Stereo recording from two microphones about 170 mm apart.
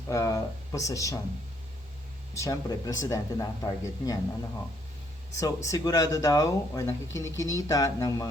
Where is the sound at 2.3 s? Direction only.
20° left (ahead or behind).